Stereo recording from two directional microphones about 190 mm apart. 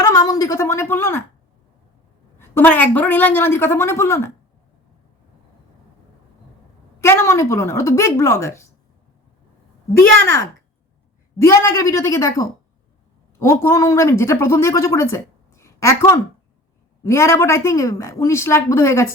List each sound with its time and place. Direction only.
0.0 s a woman's voice: 20° left (ahead or behind)
2.4 s speech: 10° left (ahead or behind)
7.0 s speech: 15° left (ahead or behind)
11.3 s speech: 15° left (ahead or behind)